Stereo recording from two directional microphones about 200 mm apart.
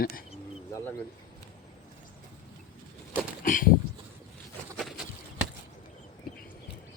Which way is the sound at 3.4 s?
45° left (ahead or behind).